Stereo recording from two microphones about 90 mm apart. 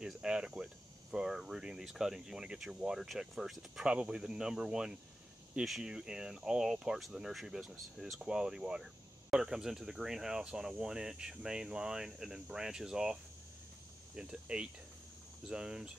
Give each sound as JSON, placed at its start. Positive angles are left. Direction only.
{"t": 0.0, "sound": "speech", "side_deg": -10}